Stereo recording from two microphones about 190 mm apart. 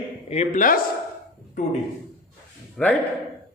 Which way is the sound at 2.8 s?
Centre (ahead or behind).